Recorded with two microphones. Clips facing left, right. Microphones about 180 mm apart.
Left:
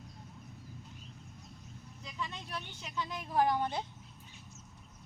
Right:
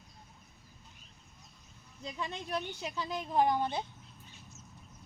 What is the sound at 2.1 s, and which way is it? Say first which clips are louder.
A woman's voice: right 5 dB; 45° right (ahead or behind).